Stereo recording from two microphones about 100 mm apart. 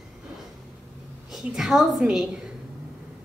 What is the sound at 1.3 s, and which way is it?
Speech, 5° right (ahead or behind).